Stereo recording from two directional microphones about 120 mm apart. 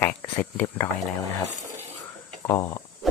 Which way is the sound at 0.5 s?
10° left (ahead or behind).